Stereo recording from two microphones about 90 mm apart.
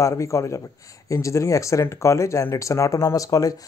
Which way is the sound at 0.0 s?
35° left (ahead or behind).